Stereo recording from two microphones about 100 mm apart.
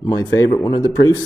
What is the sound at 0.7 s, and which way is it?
Speech, 50° left (ahead or behind).